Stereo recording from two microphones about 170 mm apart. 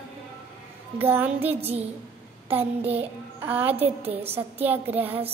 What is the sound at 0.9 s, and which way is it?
A child's voice, 10° right (ahead or behind).